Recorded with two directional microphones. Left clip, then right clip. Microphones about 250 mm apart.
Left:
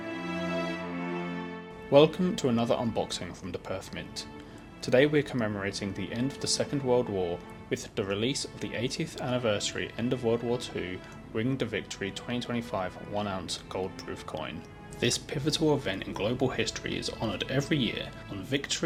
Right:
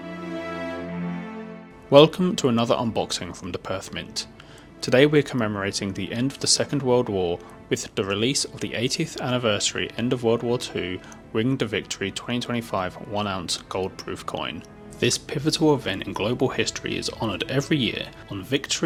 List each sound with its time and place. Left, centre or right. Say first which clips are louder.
1.9 s speech: right 7 dB; right